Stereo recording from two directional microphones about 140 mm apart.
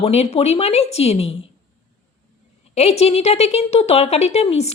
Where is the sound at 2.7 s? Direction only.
50° left (ahead or behind).